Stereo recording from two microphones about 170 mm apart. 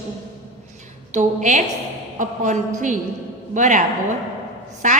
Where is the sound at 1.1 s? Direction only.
45° right (ahead or behind).